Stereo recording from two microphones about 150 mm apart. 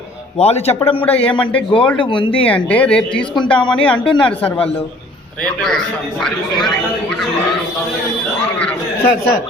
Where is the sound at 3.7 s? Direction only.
5° left (ahead or behind).